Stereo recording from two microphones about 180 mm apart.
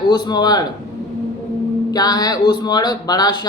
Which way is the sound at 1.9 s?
20° left (ahead or behind).